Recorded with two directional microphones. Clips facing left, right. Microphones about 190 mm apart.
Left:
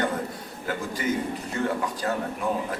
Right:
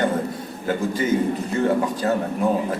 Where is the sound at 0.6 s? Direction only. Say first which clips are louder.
Right 6 dB; 25° right (ahead or behind).